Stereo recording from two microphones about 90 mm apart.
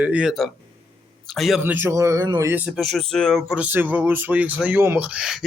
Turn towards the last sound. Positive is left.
turn(degrees=-5)  # may be behind; listen again after turning